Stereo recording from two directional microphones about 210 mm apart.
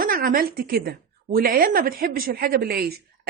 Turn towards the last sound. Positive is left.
turn(degrees=-45)  # may be behind; listen again after turning